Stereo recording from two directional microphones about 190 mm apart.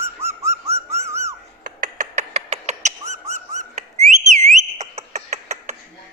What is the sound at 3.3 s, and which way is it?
Dog, 35° right (ahead or behind).